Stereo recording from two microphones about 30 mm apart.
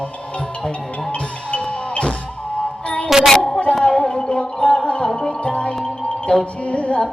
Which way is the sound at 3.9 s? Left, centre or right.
Left.